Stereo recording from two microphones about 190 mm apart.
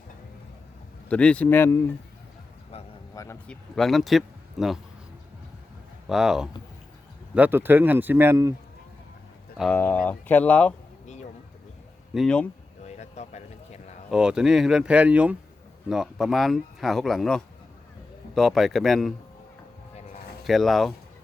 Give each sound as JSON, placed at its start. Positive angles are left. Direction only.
{"t": 1.1, "sound": "speech", "side_deg": 5}
{"t": 2.7, "sound": "a sound", "side_deg": 30}
{"t": 3.2, "sound": "speech", "side_deg": 10}
{"t": 6.1, "sound": "speech", "side_deg": 0}
{"t": 9.6, "sound": "speech", "side_deg": 5}
{"t": 11.0, "sound": "a sound", "side_deg": 40}
{"t": 12.1, "sound": "speech", "side_deg": 5}
{"t": 12.8, "sound": "a sound", "side_deg": 35}
{"t": 14.1, "sound": "speech", "side_deg": -5}
{"t": 20.4, "sound": "speech", "side_deg": 0}